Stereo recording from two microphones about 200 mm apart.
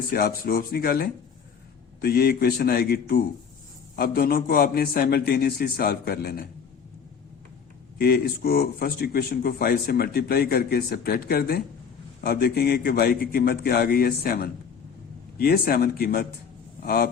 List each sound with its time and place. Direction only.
0.1 s speech: 50° left (ahead or behind)
7.9 s speech: 50° left (ahead or behind)